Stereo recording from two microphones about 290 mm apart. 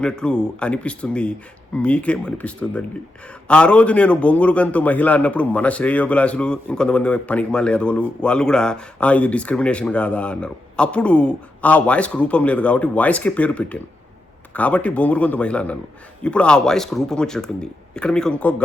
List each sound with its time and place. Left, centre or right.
0.0 s a man's voice: centre